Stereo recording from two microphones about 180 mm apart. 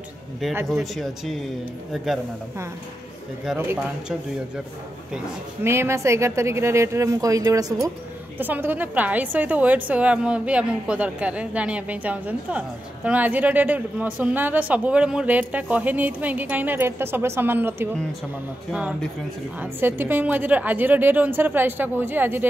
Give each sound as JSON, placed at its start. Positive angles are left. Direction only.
{"t": 0.7, "sound": "speech", "side_deg": 0}
{"t": 3.5, "sound": "a woman's voice", "side_deg": -10}
{"t": 5.1, "sound": "a woman's voice", "side_deg": -15}